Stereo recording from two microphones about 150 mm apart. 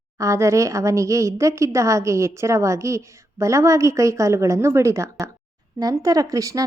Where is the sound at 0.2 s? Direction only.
20° right (ahead or behind).